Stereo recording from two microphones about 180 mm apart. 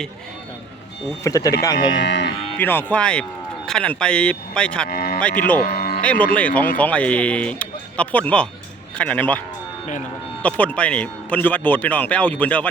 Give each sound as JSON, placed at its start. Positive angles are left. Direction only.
{"t": 1.2, "sound": "speech", "side_deg": 20}
{"t": 2.0, "sound": "speech", "side_deg": 75}
{"t": 2.6, "sound": "speech", "side_deg": 10}
{"t": 4.9, "sound": "cattle", "side_deg": 55}
{"t": 5.5, "sound": "music", "side_deg": 50}
{"t": 6.0, "sound": "speech", "side_deg": 5}
{"t": 10.4, "sound": "speech", "side_deg": 10}